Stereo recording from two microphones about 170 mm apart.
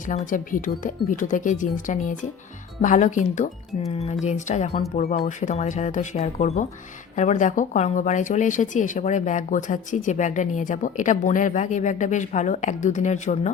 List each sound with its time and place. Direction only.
0.1 s speech: 50° left (ahead or behind)